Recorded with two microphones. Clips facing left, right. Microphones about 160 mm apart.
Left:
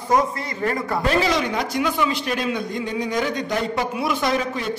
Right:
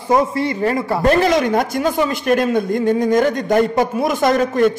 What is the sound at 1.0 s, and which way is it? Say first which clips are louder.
A man's voice: right 7 dB; 50° right (ahead or behind).